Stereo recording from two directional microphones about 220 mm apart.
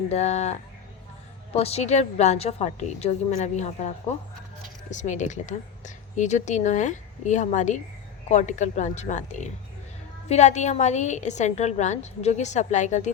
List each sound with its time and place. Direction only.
0.1 s a woman's voice: 30° left (ahead or behind)